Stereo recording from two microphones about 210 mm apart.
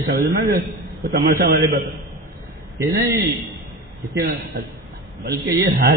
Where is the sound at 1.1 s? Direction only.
50° right (ahead or behind).